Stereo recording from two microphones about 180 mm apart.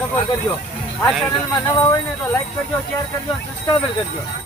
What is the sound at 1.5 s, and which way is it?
Speech, 15° left (ahead or behind).